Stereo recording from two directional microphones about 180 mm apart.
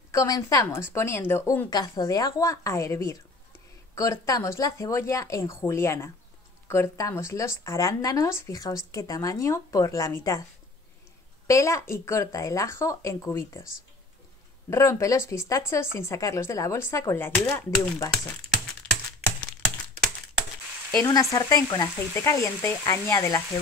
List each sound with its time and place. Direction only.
0.1 s speech: 15° left (ahead or behind)
11.4 s speech: 15° left (ahead or behind)
14.7 s speech: 15° left (ahead or behind)
20.9 s speech: 20° left (ahead or behind)